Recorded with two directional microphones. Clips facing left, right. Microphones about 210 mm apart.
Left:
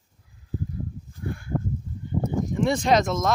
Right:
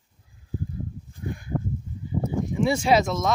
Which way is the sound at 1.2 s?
20° right (ahead or behind).